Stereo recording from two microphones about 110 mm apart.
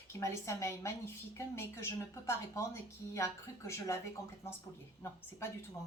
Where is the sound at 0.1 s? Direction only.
25° left (ahead or behind).